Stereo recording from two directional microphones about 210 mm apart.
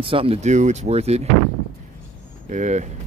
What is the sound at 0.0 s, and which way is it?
Speech, 25° right (ahead or behind).